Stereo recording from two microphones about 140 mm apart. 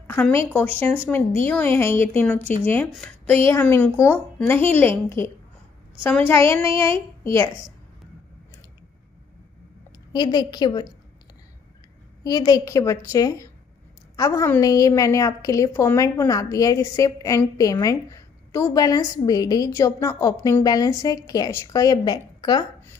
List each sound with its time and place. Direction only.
0.0 s a woman's voice: 15° left (ahead or behind)
2.9 s speech: 5° left (ahead or behind)
3.4 s a woman's voice: 15° left (ahead or behind)
6.7 s a sound: 35° right (ahead or behind)
10.1 s a woman's voice: 30° left (ahead or behind)
12.2 s a woman's voice: 30° left (ahead or behind)